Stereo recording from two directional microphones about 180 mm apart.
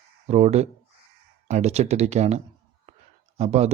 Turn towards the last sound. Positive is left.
turn(degrees=-40)  # may be behind; listen again after turning